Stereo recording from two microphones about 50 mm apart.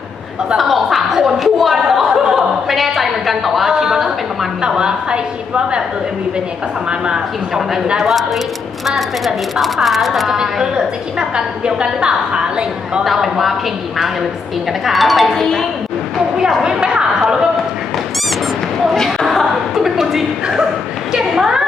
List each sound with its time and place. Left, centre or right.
0.5 s a sound: centre
4.6 s a woman's voice: centre
7.9 s speech: centre
13.2 s speech: centre
14.8 s speech: centre
16.6 s speech: centre
18.9 s chuckle: centre
21.1 s a woman's voice: centre